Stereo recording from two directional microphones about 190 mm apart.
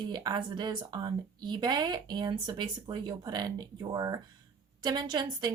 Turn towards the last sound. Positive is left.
turn(degrees=-25)  # may be behind; listen again after turning